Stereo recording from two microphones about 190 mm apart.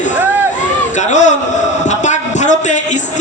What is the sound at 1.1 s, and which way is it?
Speech, 40° left (ahead or behind).